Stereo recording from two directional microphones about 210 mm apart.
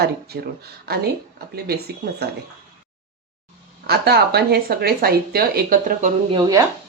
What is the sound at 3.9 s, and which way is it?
Speech, 50° right (ahead or behind).